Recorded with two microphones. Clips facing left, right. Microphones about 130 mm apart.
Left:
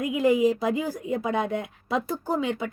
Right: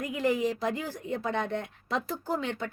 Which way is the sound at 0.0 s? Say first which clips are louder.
Left 7 dB; 10° left (ahead or behind).